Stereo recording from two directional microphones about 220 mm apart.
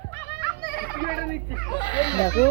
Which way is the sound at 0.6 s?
45° right (ahead or behind).